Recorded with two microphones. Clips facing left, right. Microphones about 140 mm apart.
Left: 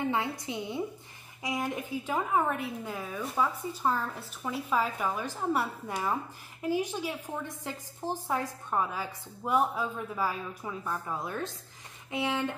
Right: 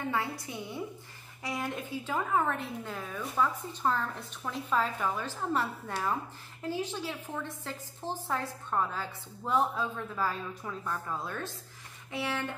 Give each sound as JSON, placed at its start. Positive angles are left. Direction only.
{"t": 0.1, "sound": "a woman's voice", "side_deg": 20}